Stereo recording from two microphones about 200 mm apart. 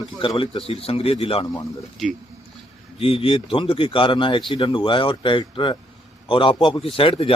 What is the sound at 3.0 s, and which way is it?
A man's voice, 25° left (ahead or behind).